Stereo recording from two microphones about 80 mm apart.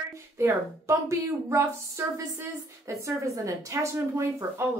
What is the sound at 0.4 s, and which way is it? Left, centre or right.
A woman's voice, right.